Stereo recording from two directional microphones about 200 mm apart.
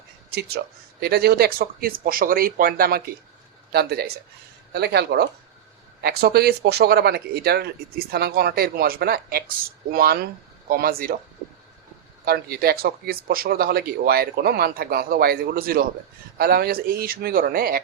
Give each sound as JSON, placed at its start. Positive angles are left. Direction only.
{"t": 0.3, "sound": "speech", "side_deg": -55}
{"t": 12.2, "sound": "speech", "side_deg": -50}